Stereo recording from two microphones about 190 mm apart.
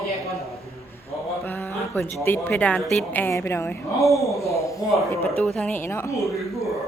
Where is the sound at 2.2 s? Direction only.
10° left (ahead or behind).